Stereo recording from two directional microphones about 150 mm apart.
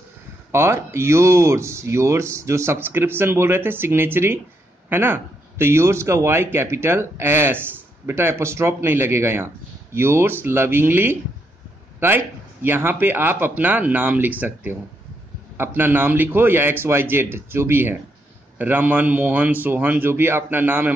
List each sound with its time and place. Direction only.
0.5 s a man's voice: 15° right (ahead or behind)
12.6 s a man's voice: 15° right (ahead or behind)